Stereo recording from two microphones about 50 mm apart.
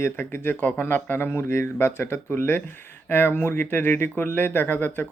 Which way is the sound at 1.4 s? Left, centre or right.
Left.